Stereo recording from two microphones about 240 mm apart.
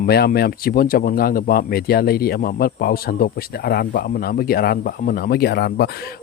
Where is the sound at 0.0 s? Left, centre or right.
Left.